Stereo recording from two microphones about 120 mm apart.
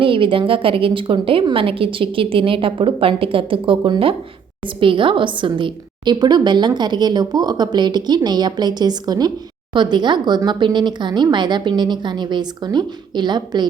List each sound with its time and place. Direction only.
0.0 s a woman's voice: 45° right (ahead or behind)